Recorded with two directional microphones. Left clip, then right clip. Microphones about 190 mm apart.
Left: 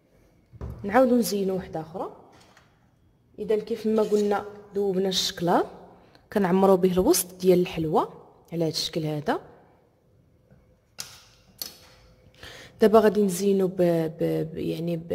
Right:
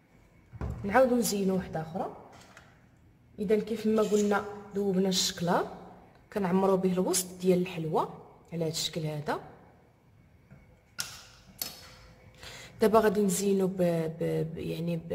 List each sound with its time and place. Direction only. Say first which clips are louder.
0.8 s a woman's voice: left 4 dB; 30° left (ahead or behind)
3.4 s a woman's voice: left 3 dB; 30° left (ahead or behind)
12.4 s speech: left 6 dB; 25° left (ahead or behind)